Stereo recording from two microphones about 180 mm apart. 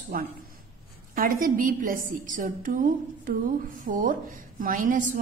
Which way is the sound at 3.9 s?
50° right (ahead or behind).